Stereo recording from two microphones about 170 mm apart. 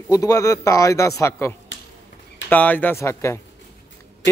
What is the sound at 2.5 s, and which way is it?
Speech, 10° left (ahead or behind).